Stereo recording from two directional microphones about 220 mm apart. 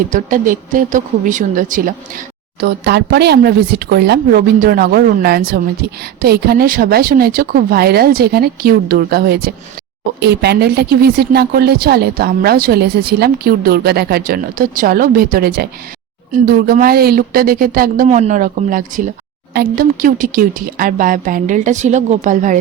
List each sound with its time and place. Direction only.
0.1 s a woman's voice: 40° right (ahead or behind)
2.6 s a woman's voice: 50° right (ahead or behind)